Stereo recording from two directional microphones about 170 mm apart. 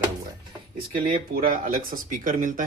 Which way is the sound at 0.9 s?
55° right (ahead or behind).